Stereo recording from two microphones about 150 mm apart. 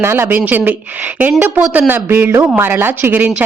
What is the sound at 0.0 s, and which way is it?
A woman's voice, 15° right (ahead or behind).